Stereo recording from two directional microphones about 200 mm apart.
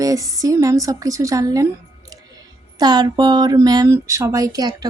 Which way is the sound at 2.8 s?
20° right (ahead or behind).